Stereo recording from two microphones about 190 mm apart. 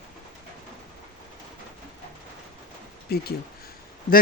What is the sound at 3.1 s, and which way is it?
Speech, 55° left (ahead or behind).